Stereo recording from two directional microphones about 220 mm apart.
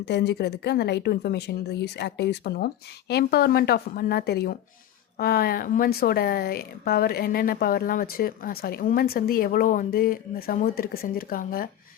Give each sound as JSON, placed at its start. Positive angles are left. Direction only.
{"t": 0.0, "sound": "speech", "side_deg": 50}